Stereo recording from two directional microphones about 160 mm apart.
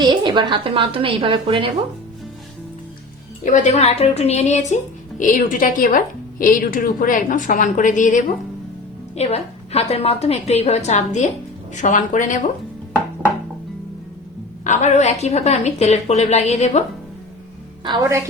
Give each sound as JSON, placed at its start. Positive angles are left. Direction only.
{"t": 0.0, "sound": "a woman's voice", "side_deg": -30}
{"t": 3.4, "sound": "a woman's voice", "side_deg": 50}
{"t": 9.1, "sound": "a woman's voice", "side_deg": 40}
{"t": 14.6, "sound": "a woman's voice", "side_deg": 50}